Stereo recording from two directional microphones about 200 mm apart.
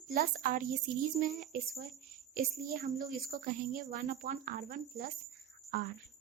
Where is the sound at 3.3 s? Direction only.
45° right (ahead or behind).